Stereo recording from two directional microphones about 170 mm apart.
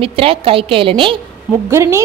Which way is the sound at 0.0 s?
35° right (ahead or behind).